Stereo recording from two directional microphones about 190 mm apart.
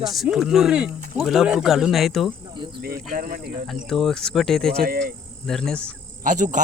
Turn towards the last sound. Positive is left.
turn(degrees=-40)  # may be behind; listen again after turning